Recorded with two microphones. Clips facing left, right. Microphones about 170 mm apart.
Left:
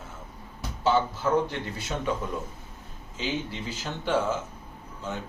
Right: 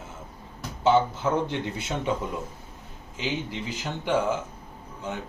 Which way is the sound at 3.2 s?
15° right (ahead or behind).